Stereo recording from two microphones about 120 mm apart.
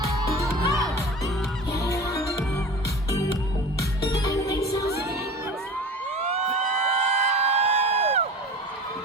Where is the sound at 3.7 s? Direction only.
30° left (ahead or behind).